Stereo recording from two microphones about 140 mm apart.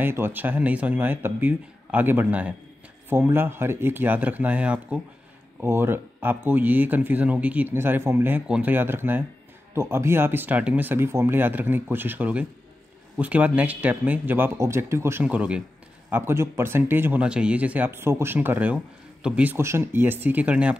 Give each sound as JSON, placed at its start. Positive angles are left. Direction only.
{"t": 0.0, "sound": "speech", "side_deg": -15}
{"t": 15.2, "sound": "speech", "side_deg": -10}